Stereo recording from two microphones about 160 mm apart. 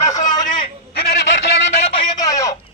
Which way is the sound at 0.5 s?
80° left.